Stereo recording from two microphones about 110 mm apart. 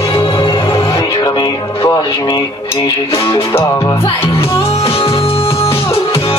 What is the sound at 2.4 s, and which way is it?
Cutlery, 40° left (ahead or behind).